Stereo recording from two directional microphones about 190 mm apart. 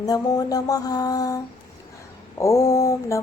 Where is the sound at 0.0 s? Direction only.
20° left (ahead or behind).